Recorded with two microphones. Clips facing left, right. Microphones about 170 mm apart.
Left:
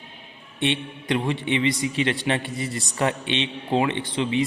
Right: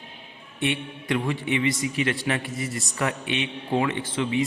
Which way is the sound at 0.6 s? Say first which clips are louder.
Left 2 dB; 20° left (ahead or behind).